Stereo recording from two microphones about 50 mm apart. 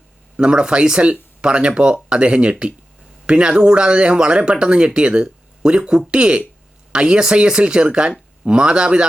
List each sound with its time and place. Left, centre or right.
0.3 s speech: centre